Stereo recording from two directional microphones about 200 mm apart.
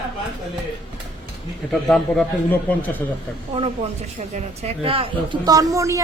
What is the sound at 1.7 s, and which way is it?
A man's voice, centre (ahead or behind).